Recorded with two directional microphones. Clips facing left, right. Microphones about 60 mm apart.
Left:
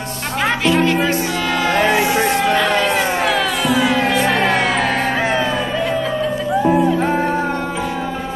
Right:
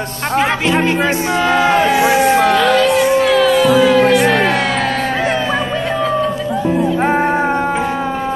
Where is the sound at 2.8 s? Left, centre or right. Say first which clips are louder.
Right 5 dB; centre.